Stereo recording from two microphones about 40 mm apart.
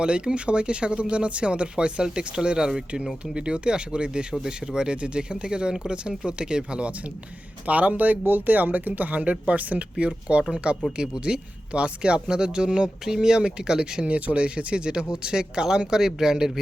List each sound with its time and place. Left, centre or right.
0.0 s speech: right
10.5 s speech: right
14.0 s speech: right; by 16.5 s centre